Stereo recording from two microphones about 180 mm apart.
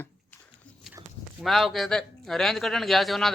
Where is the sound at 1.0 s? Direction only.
20° right (ahead or behind).